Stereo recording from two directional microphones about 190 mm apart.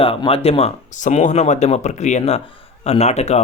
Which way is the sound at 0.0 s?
30° left (ahead or behind).